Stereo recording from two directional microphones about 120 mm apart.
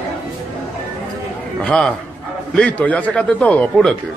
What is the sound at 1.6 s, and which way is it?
A man's voice, 10° left (ahead or behind).